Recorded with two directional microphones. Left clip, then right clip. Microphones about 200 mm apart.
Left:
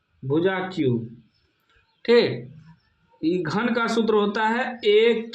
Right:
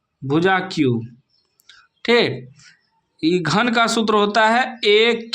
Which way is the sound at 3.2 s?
40° right (ahead or behind).